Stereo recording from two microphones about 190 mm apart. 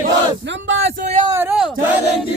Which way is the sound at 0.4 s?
80° right.